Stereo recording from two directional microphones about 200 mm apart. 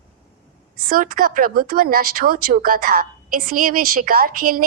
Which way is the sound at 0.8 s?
45° right (ahead or behind).